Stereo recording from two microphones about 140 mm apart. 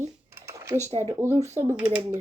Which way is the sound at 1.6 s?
20° right (ahead or behind).